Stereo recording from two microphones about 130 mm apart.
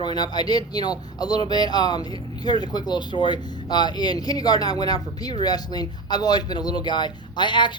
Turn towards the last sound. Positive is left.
turn(degrees=35)  # may be behind; listen again after turning